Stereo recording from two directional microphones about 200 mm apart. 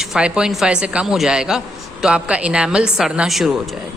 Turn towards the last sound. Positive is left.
turn(degrees=0)  # may be behind; listen again after turning